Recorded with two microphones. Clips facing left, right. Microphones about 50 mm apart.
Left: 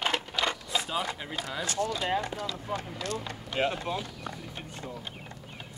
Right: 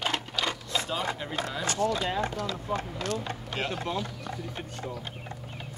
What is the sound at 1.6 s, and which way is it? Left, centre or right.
Speech, right.